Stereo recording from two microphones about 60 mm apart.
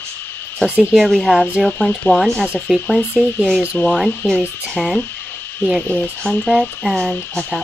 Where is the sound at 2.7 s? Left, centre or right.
Centre.